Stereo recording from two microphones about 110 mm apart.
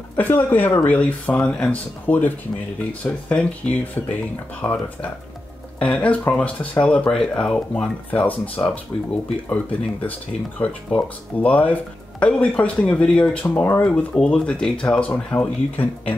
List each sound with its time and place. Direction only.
0.1 s speech: 15° left (ahead or behind)
11.3 s speech: 15° left (ahead or behind)